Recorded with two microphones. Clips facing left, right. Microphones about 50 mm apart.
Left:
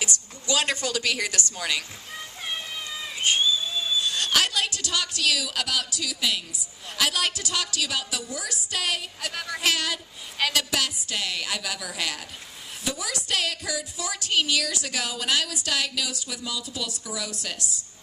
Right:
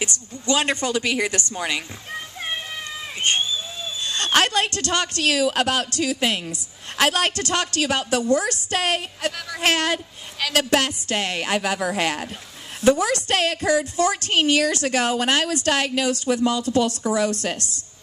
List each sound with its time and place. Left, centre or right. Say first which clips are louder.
0.0 s a woman's voice: right 4 dB; right
3.2 s a sound: right 2 dB; right
4.0 s a woman's voice: right 7 dB; right
8.2 s a woman's voice: right 13 dB; right
12.8 s a woman's voice: right 14 dB; right
14.3 s a woman's voice: right 2 dB; right